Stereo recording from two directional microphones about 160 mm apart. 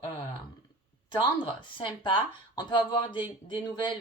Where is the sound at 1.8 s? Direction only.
30° left (ahead or behind).